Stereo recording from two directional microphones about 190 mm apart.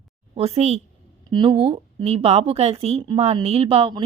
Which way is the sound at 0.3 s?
35° right (ahead or behind).